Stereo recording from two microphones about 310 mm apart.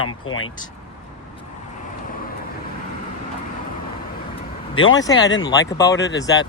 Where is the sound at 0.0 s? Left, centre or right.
Left.